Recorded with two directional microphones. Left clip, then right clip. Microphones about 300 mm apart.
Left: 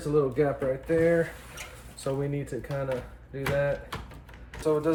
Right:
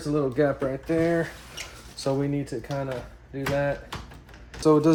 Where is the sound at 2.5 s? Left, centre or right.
Centre.